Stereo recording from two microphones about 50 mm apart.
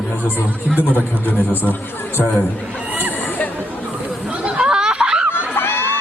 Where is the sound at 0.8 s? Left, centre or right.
Left.